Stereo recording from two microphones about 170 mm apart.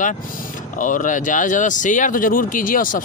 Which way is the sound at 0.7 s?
50° left (ahead or behind).